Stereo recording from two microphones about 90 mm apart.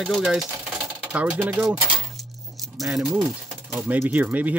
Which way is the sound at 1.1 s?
15° right (ahead or behind).